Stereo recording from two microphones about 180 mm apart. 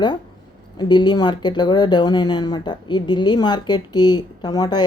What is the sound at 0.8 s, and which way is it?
Speech, 25° left (ahead or behind).